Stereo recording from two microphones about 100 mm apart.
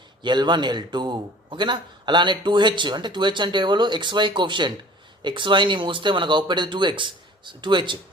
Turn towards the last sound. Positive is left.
turn(degrees=-50)  # may be behind; listen again after turning